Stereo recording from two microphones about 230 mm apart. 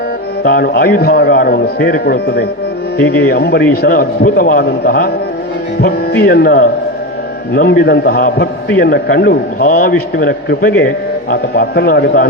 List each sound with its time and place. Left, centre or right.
0.4 s a man's voice: left